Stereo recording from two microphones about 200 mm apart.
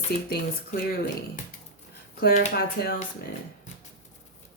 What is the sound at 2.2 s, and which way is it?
Speech, 50° left (ahead or behind).